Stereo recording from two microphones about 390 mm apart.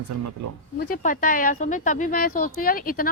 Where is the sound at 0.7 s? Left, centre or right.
Left.